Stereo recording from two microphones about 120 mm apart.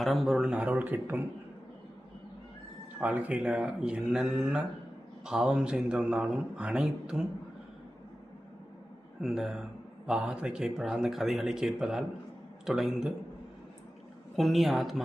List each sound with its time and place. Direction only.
0.0 s speech: centre (ahead or behind); by 1.2 s 15° right (ahead or behind)
3.0 s speech: 10° right (ahead or behind)
9.2 s speech: centre (ahead or behind)
14.3 s speech: centre (ahead or behind)